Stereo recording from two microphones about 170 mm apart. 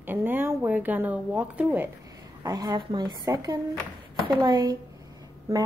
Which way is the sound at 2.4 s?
20° right (ahead or behind).